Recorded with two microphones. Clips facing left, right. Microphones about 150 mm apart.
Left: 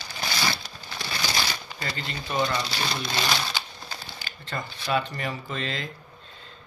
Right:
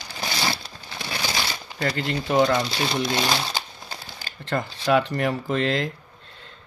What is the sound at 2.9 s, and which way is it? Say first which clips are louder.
Speech: right 5 dB; 25° right (ahead or behind).